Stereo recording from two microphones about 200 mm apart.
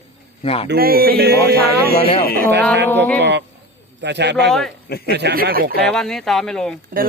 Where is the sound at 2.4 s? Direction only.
60° right (ahead or behind).